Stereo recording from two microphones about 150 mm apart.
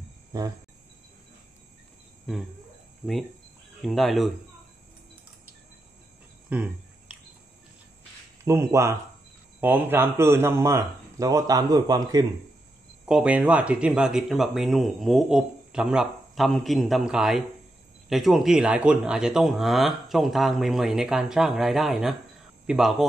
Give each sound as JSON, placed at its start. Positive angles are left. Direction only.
{"t": 0.3, "sound": "cricket", "side_deg": -25}
{"t": 2.3, "sound": "speech", "side_deg": 0}
{"t": 3.8, "sound": "speech", "side_deg": 0}
{"t": 6.5, "sound": "cricket", "side_deg": -10}
{"t": 8.5, "sound": "speech", "side_deg": -20}
{"t": 13.0, "sound": "speech", "side_deg": -5}